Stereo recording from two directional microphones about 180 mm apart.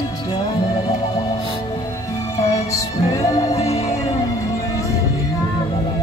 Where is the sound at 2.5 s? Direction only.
20° left (ahead or behind).